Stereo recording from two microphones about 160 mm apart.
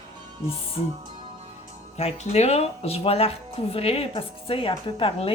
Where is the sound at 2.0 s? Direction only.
40° left (ahead or behind).